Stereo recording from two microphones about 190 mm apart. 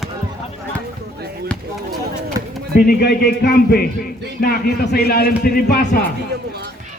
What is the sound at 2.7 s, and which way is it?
Speech, 55° left (ahead or behind).